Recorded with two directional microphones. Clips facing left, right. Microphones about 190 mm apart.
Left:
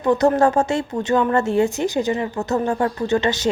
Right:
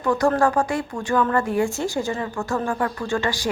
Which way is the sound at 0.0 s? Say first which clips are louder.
Left 3 dB; 20° left (ahead or behind).